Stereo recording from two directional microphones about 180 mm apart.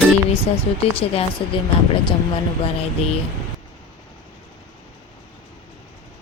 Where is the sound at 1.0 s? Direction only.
30° left (ahead or behind).